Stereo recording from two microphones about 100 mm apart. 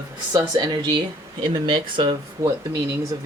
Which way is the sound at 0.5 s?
45° right (ahead or behind).